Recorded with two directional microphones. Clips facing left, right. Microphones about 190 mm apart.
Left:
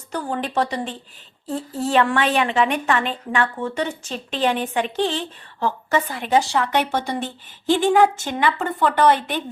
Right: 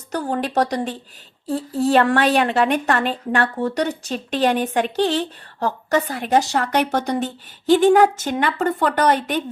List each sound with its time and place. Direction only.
0.1 s a woman's voice: 45° right (ahead or behind)
1.8 s a woman's voice: 40° right (ahead or behind)